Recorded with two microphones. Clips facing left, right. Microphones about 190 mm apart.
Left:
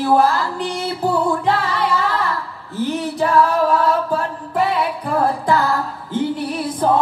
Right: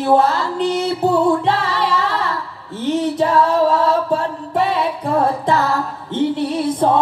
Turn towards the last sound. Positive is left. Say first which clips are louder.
# right 3 dB
turn(degrees=-25)  # may be behind; listen again after turning